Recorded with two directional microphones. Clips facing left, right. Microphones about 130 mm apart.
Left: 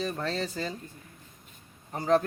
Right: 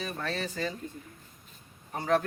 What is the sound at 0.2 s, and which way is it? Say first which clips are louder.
Speech: left 1 dB; 30° left (ahead or behind).